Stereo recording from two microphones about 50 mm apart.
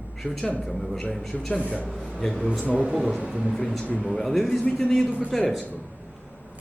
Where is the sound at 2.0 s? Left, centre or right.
Left.